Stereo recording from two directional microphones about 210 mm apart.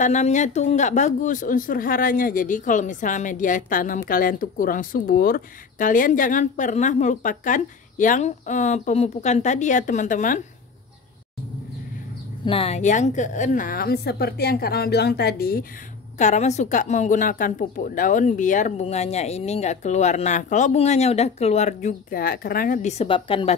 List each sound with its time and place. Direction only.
0.0 s speech: 35° left (ahead or behind)
12.4 s a woman's voice: 30° left (ahead or behind); by 15.6 s 45° left (ahead or behind)
16.2 s speech: 35° left (ahead or behind)